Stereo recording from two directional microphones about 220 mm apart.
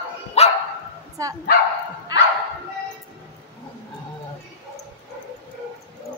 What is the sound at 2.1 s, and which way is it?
Bow-wow, 15° right (ahead or behind).